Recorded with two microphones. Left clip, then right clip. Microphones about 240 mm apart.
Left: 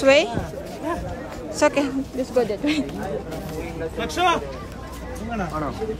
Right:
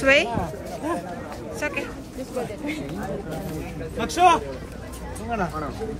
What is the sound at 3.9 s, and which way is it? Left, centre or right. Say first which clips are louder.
Speech: right 3 dB; centre.